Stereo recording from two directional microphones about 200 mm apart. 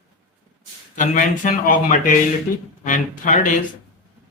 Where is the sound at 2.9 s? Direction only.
40° left (ahead or behind).